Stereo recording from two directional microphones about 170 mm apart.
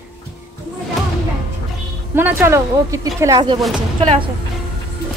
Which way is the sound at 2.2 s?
15° right (ahead or behind).